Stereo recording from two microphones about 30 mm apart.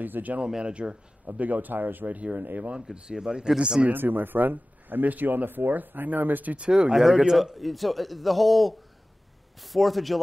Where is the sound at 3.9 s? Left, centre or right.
Right.